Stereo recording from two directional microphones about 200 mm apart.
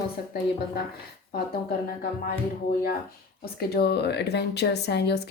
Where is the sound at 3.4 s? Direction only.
50° left (ahead or behind).